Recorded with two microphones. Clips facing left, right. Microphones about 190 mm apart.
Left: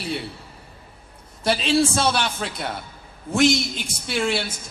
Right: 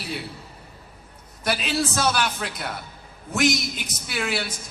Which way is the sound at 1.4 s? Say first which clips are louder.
Left 5 dB; 30° left (ahead or behind).